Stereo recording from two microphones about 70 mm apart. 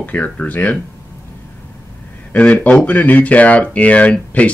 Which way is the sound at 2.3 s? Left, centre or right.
Centre.